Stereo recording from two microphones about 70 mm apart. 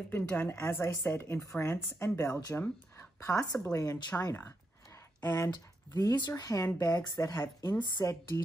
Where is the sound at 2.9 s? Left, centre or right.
Left.